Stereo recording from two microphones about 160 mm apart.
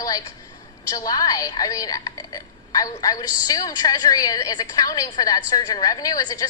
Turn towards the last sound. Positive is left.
turn(degrees=20)  # may be behind; listen again after turning